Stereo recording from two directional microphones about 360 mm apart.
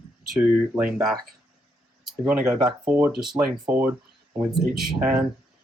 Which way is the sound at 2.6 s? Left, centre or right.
Centre.